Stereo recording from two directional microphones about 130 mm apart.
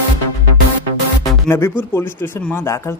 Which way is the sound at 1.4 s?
15° left (ahead or behind).